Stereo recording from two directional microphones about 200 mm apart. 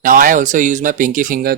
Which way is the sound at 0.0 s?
40° right (ahead or behind).